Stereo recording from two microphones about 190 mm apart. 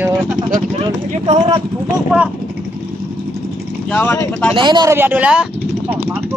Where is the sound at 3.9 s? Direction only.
10° left (ahead or behind).